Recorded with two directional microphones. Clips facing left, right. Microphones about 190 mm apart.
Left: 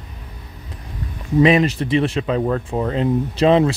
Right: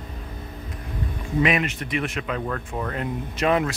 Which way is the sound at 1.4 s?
30° left (ahead or behind).